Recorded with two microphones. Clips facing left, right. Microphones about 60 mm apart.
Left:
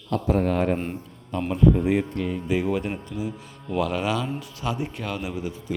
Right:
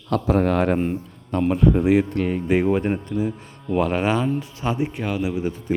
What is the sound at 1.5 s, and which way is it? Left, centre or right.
Speech, right.